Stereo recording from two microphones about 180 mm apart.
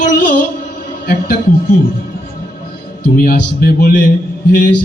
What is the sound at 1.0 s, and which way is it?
Speech, 55° left (ahead or behind).